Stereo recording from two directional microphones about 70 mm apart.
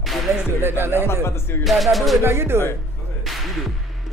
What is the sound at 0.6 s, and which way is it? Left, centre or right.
Speech, right.